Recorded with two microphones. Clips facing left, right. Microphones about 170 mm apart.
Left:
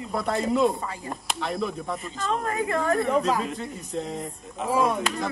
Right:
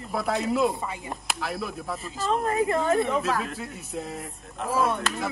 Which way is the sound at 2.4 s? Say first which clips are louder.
Right 3 dB; 30° right (ahead or behind).